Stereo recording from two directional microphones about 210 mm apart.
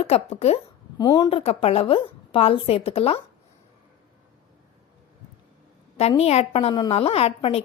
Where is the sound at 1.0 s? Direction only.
15° left (ahead or behind).